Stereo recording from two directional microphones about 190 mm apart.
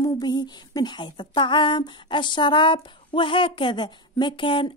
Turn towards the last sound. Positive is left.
turn(degrees=25)  # may be behind; listen again after turning